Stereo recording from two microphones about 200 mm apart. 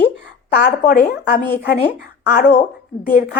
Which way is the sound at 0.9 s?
45° left (ahead or behind).